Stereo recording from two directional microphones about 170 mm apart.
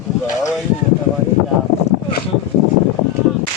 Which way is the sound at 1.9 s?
40° left (ahead or behind).